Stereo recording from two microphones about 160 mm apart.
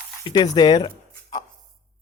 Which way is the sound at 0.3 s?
30° left (ahead or behind).